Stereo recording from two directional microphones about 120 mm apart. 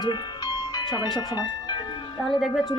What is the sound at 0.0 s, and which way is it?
Music, 35° left (ahead or behind).